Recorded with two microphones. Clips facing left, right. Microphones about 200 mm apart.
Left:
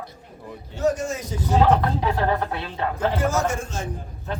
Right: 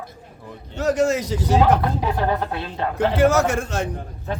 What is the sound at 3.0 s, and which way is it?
Speech, 70° right (ahead or behind).